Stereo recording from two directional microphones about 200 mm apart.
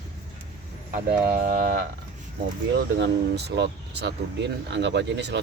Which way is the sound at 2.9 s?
60° right (ahead or behind).